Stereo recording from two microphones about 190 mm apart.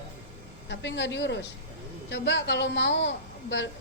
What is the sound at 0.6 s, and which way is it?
A woman's voice, 65° left (ahead or behind).